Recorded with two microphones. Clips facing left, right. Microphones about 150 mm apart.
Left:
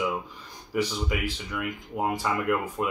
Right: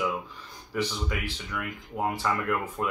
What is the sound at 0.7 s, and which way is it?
Speech, 15° left (ahead or behind).